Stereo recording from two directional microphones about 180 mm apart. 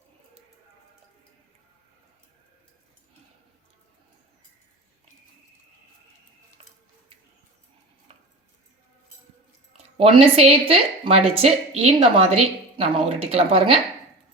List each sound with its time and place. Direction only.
9.7 s speech: 35° right (ahead or behind)